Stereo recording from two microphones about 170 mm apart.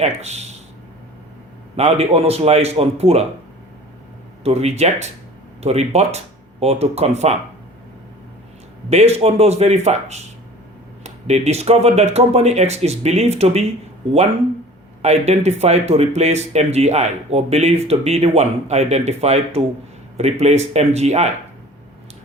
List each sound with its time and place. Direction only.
0.0 s speech: 40° right (ahead or behind)
1.7 s speech: 40° right (ahead or behind)
4.4 s speech: 40° right (ahead or behind)
8.9 s speech: 40° right (ahead or behind)
15.0 s speech: 40° right (ahead or behind)